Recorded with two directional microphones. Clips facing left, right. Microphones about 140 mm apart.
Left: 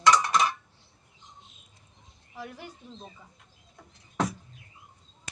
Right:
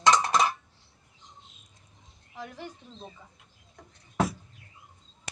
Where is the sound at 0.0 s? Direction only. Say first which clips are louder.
Even; 25° right (ahead or behind).